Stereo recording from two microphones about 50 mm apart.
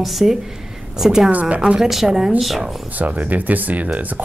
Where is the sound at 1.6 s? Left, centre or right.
Centre.